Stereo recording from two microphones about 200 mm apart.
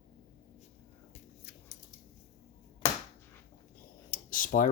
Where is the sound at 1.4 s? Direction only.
50° left (ahead or behind).